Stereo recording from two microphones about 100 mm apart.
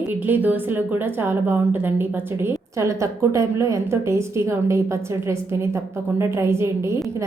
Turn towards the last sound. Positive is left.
turn(degrees=-30)  # may be behind; listen again after turning